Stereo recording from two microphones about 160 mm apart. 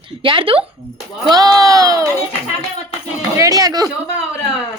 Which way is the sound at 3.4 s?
20° right (ahead or behind).